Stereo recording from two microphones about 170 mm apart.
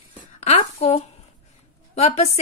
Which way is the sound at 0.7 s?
40° left (ahead or behind).